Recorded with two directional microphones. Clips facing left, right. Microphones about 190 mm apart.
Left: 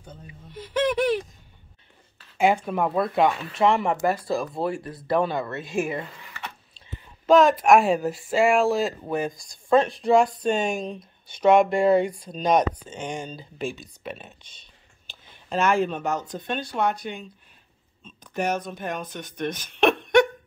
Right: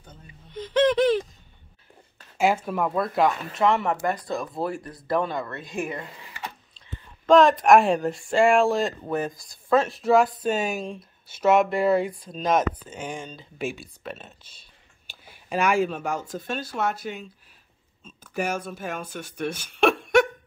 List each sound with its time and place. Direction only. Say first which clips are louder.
0.6 s a sound: right 3 dB; 10° left (ahead or behind)
2.3 s speech: left 1 dB; 5° right (ahead or behind)
4.0 s speech: left 3 dB; 30° left (ahead or behind)
4.4 s speech: left 2 dB; centre (ahead or behind)
5.4 s speech: left 4 dB; 25° left (ahead or behind)
7.2 s speech: even; centre (ahead or behind)
15.2 s speech: left 1 dB; 10° right (ahead or behind)